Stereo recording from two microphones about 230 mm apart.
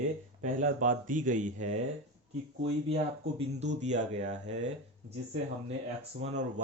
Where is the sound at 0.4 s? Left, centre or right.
Right.